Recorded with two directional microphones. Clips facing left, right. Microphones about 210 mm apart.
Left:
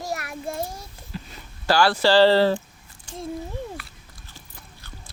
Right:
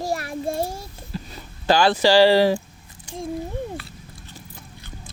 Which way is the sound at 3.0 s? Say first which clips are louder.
Right 3 dB; 15° right (ahead or behind).